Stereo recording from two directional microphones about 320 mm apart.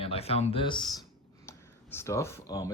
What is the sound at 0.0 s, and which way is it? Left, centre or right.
Speech, centre.